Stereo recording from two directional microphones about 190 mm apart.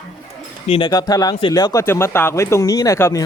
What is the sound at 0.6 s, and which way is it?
Speech, 30° left (ahead or behind).